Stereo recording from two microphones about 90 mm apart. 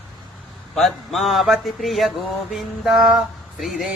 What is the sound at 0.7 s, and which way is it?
Mantra, centre (ahead or behind).